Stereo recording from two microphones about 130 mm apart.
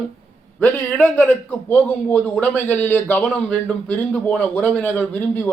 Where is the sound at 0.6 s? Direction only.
15° left (ahead or behind).